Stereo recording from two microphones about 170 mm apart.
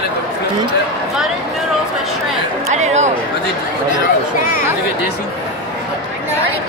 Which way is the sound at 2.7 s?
45° right (ahead or behind).